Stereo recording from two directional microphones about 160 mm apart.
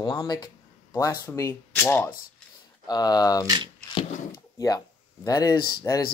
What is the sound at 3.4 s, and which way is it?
Speech, 25° right (ahead or behind).